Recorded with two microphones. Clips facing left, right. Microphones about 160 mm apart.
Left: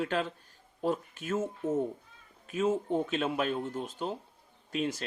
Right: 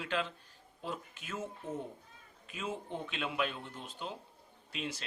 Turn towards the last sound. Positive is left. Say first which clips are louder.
# left 9 dB
turn(degrees=45)  # may be behind; listen again after turning